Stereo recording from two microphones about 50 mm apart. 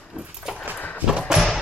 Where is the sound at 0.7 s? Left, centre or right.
Left.